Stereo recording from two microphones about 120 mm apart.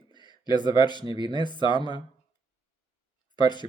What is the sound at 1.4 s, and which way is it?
Speech, 40° left (ahead or behind).